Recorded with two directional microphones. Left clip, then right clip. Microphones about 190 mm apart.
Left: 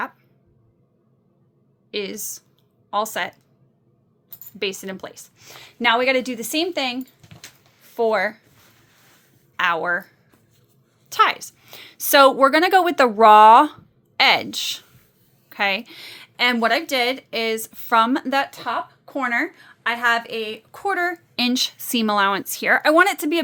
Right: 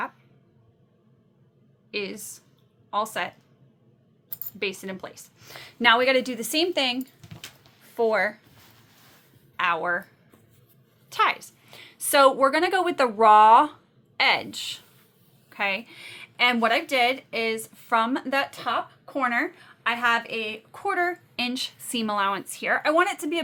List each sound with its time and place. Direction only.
1.9 s speech: 30° left (ahead or behind)
4.6 s a woman's voice: 30° left (ahead or behind)
5.4 s a woman's voice: 10° left (ahead or behind)
7.9 s a woman's voice: 20° left (ahead or behind)
9.6 s speech: 30° left (ahead or behind)
11.1 s a woman's voice: 35° left (ahead or behind); by 23.4 s 50° left (ahead or behind)